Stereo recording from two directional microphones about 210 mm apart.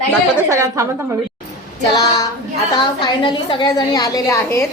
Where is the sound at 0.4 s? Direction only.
15° right (ahead or behind).